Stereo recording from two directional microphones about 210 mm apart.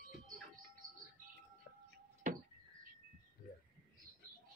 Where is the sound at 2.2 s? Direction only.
35° right (ahead or behind).